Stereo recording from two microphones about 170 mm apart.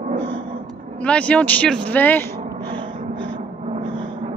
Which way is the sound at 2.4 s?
25° right (ahead or behind).